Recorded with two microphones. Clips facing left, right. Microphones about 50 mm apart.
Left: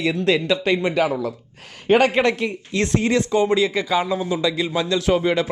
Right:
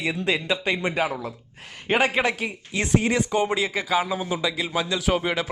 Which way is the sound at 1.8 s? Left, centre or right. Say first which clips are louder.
Left 5 dB; centre.